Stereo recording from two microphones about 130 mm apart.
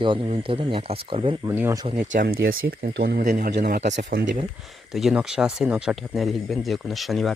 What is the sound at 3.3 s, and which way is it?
Speech, 75° right (ahead or behind).